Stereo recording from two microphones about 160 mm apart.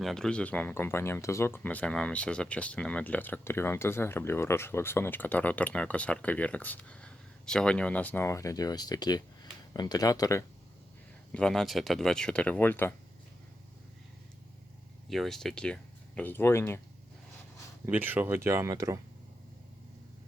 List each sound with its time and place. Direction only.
0.0 s speech: 5° left (ahead or behind); by 10.4 s 20° left (ahead or behind)
11.3 s speech: 5° left (ahead or behind)
15.1 s speech: centre (ahead or behind)
17.8 s speech: 10° right (ahead or behind)